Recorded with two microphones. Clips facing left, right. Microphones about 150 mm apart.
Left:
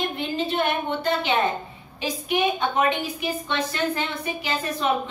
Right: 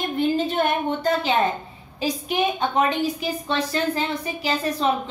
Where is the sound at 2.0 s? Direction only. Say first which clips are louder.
Right 1 dB; 35° right (ahead or behind).